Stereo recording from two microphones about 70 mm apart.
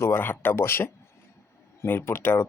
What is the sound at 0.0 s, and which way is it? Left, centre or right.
Speech, left.